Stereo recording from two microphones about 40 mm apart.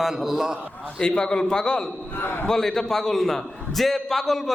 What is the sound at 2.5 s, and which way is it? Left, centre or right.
A man's voice, centre.